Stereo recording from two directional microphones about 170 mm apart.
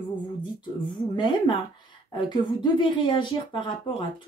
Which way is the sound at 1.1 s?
30° left (ahead or behind).